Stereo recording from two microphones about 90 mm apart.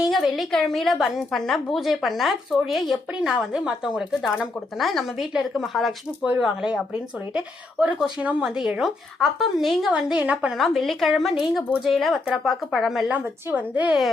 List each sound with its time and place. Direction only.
0.1 s a sound: centre (ahead or behind)
0.5 s a woman's voice: 5° left (ahead or behind)
7.3 s a woman's voice: 15° right (ahead or behind)
10.6 s a woman's voice: centre (ahead or behind)
13.1 s speech: 15° right (ahead or behind)